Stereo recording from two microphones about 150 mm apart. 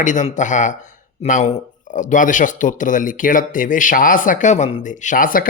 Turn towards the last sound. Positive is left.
turn(degrees=70)  # may be behind; listen again after turning